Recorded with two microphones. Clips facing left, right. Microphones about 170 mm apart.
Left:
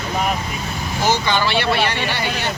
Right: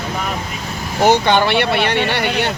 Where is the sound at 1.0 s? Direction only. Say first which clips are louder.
Right 6 dB; 60° right (ahead or behind).